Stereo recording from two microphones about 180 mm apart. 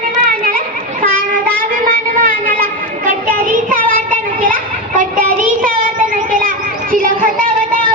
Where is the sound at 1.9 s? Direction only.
55° right (ahead or behind).